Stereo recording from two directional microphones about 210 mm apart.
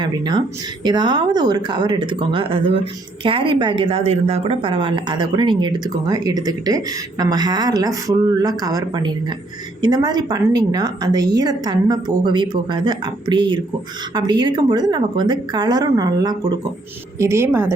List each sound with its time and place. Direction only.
0.0 s a woman's voice: 20° right (ahead or behind)